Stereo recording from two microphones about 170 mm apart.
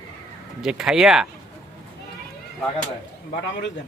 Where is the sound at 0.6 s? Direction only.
5° right (ahead or behind).